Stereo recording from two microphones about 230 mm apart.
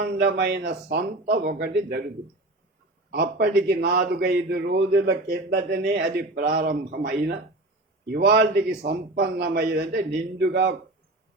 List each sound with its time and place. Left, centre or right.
0.0 s a man's voice: right
3.1 s a man's voice: right